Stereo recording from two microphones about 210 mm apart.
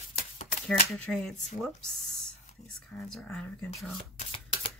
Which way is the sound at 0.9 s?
5° left (ahead or behind).